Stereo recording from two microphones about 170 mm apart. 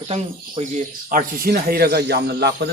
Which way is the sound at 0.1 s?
45° right (ahead or behind).